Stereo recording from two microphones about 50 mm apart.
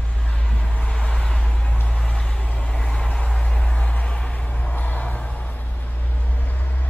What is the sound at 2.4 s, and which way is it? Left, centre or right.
Vehicle, left.